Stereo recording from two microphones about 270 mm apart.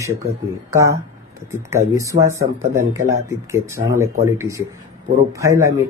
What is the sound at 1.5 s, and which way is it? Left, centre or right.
Speech, centre.